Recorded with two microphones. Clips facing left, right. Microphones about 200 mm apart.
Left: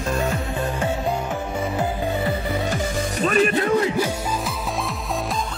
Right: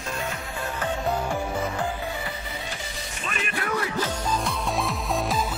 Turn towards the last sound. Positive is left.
turn(degrees=20)  # may be behind; listen again after turning